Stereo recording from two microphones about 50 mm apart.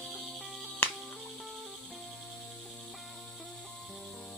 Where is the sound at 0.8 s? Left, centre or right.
Left.